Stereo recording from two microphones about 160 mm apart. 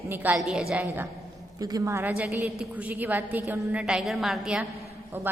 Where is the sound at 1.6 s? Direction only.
20° right (ahead or behind).